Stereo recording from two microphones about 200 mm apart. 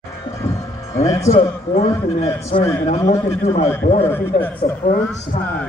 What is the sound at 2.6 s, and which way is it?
Speech, 15° left (ahead or behind).